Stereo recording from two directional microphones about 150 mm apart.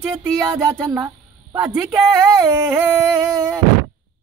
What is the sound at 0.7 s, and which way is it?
Speech, 25° right (ahead or behind).